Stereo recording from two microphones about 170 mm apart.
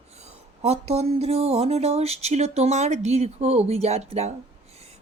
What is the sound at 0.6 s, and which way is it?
Speech, 40° right (ahead or behind).